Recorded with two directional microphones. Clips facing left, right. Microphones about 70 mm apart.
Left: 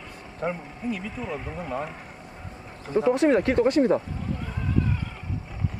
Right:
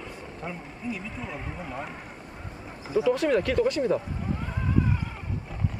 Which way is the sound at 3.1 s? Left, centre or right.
Left.